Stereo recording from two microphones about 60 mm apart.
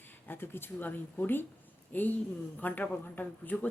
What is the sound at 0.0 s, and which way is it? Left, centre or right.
A woman's voice, left.